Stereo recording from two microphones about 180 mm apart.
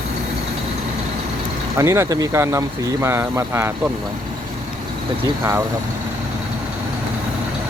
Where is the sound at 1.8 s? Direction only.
15° right (ahead or behind).